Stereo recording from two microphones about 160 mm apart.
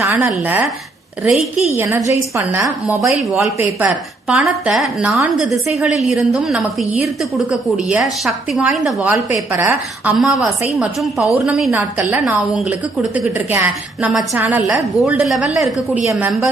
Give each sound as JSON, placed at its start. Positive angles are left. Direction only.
{"t": 0.0, "sound": "a woman's voice", "side_deg": -15}
{"t": 1.7, "sound": "a woman's voice", "side_deg": -20}
{"t": 9.1, "sound": "a woman's voice", "side_deg": -15}